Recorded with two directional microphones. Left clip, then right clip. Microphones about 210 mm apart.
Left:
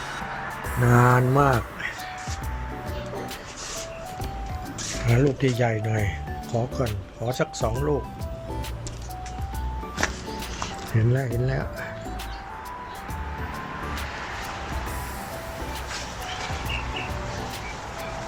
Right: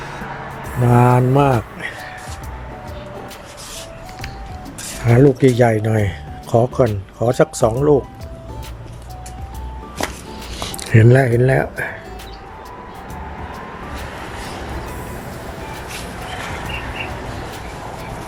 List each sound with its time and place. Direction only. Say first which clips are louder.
0.9 s mantra: right 5 dB; 10° right (ahead or behind)
5.0 s speech: right 11 dB; 25° right (ahead or behind)
10.9 s speech: right 16 dB; 40° right (ahead or behind)